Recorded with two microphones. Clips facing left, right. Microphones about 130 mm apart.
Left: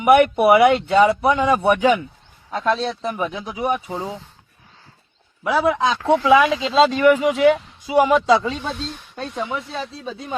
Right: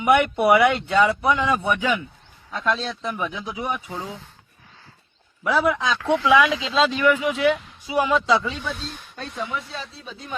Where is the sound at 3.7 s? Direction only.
25° left (ahead or behind).